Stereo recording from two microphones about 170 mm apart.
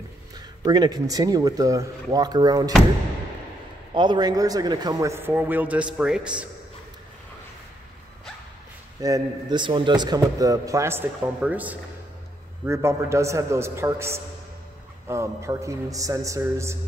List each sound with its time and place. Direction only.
0.6 s speech: 25° right (ahead or behind)
3.9 s a man's voice: 25° right (ahead or behind); by 6.3 s 5° right (ahead or behind)
9.0 s a man's voice: 25° right (ahead or behind)